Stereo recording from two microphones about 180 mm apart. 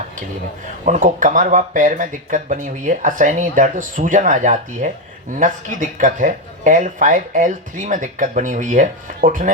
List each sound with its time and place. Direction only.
0.9 s speech: 45° right (ahead or behind)